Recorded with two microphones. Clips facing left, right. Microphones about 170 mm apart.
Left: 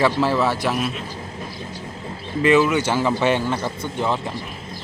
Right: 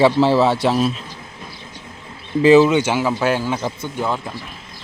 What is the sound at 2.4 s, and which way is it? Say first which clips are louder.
Speech: right 5 dB; 30° right (ahead or behind).